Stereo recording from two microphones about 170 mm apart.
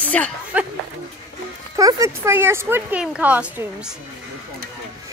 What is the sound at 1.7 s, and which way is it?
Speech, 20° right (ahead or behind).